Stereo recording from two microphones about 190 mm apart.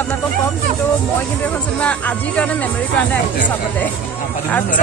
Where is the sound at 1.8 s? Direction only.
5° left (ahead or behind).